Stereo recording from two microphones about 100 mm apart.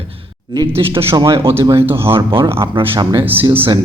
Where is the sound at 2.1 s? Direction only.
60° right (ahead or behind).